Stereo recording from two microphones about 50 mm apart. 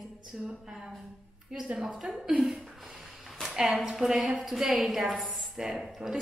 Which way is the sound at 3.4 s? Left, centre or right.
Centre.